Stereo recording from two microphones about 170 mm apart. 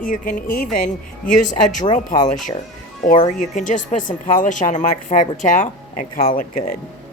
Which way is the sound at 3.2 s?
45° left (ahead or behind).